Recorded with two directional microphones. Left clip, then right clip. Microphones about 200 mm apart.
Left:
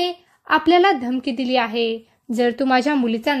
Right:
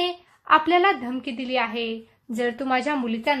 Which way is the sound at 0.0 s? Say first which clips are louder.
Left 3 dB; 35° left (ahead or behind).